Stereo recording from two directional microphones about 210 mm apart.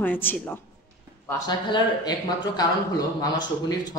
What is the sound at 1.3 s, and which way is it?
Speech, 20° left (ahead or behind).